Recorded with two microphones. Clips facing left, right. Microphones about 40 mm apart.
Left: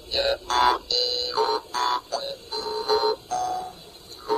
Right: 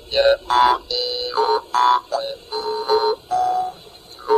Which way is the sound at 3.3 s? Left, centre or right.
Right.